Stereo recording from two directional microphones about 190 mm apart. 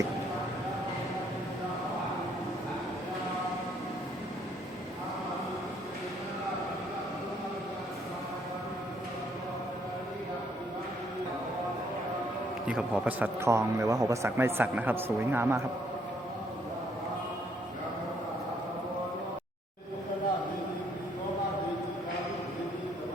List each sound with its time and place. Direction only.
12.6 s a man's voice: 5° right (ahead or behind)